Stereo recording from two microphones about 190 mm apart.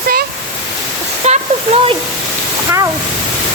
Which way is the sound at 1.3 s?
35° right (ahead or behind).